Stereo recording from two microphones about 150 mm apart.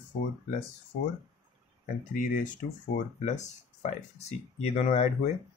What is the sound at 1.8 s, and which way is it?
Speech, 60° left (ahead or behind).